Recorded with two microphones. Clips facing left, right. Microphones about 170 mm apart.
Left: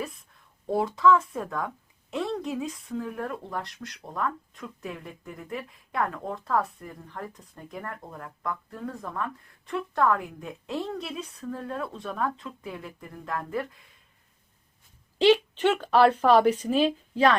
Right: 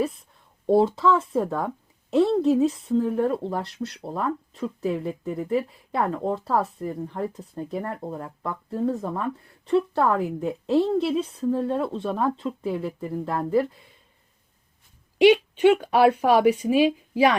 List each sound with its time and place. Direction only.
0.0 s a sound: 30° right (ahead or behind)
0.7 s a woman's voice: 30° right (ahead or behind)
15.2 s speech: 10° right (ahead or behind)